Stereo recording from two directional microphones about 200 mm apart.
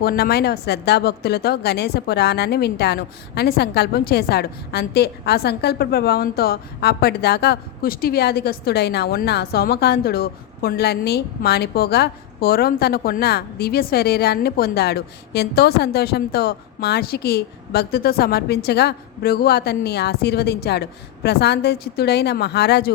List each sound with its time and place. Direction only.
0.0 s a woman's voice: 50° left (ahead or behind)